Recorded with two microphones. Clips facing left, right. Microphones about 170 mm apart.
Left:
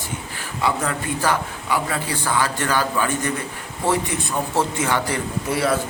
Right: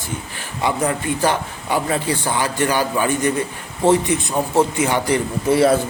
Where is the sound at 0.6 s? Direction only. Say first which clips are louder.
Right 3 dB; 20° right (ahead or behind).